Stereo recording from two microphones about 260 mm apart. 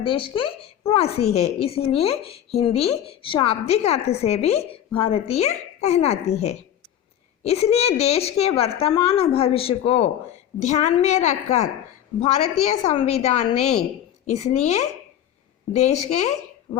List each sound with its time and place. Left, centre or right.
0.0 s a woman's voice: centre
13.6 s a woman's voice: left
14.3 s a woman's voice: left